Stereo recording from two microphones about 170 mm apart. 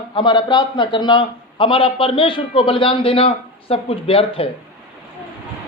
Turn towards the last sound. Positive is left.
turn(degrees=35)  # may be behind; listen again after turning